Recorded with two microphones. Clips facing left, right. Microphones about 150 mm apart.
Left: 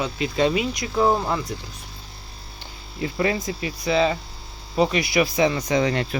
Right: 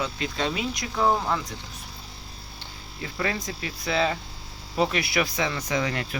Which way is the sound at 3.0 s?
20° left (ahead or behind).